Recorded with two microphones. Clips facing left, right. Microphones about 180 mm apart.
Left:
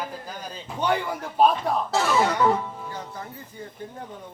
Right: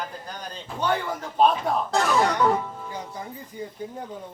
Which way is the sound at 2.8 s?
15° right (ahead or behind).